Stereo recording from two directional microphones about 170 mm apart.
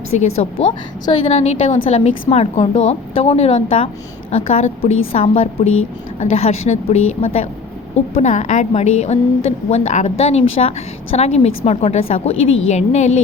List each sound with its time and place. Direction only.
0.1 s a woman's voice: 40° left (ahead or behind)
1.0 s a woman's voice: 30° left (ahead or behind)